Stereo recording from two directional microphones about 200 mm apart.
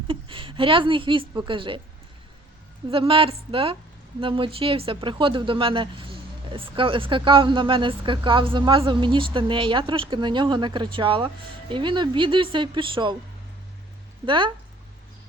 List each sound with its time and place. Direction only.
0.1 s speech: 25° right (ahead or behind)
2.9 s speech: 25° right (ahead or behind)
14.3 s speech: 25° right (ahead or behind)